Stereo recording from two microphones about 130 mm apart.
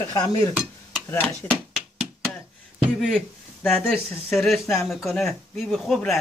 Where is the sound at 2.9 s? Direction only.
Centre (ahead or behind).